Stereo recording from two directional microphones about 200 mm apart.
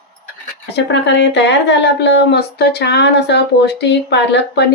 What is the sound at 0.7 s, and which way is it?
Speech, 60° left (ahead or behind).